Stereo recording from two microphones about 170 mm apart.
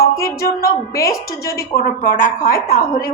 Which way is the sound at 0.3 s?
60° left (ahead or behind).